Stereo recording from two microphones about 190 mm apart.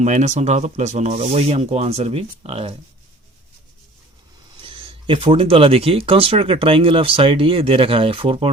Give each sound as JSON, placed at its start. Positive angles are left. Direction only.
{"t": 0.0, "sound": "speech", "side_deg": -35}
{"t": 4.6, "sound": "speech", "side_deg": -30}